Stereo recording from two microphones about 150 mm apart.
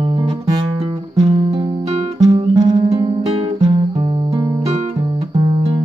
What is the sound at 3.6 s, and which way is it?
Music, 25° right (ahead or behind).